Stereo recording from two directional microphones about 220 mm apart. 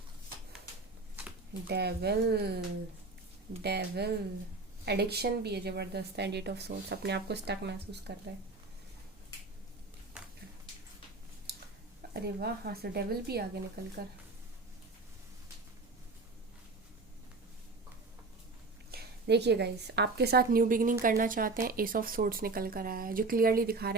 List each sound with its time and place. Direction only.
1.6 s a woman's voice: 50° right (ahead or behind)
3.6 s a woman's voice: 50° right (ahead or behind)
10.2 s a sound: 5° right (ahead or behind)
12.1 s a woman's voice: 45° right (ahead or behind)
18.9 s a woman's voice: 50° right (ahead or behind)